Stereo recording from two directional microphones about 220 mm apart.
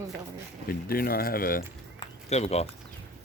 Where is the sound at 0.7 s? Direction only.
45° left (ahead or behind).